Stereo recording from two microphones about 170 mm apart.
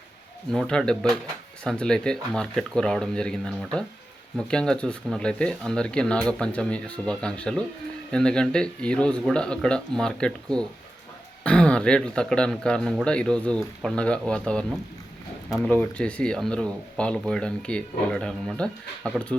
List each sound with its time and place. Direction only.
0.5 s speech: 5° left (ahead or behind)